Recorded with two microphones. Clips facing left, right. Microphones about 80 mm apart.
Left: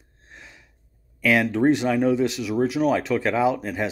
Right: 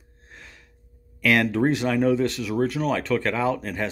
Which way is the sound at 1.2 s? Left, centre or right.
Centre.